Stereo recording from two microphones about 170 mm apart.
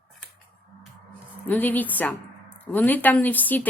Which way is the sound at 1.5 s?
10° left (ahead or behind).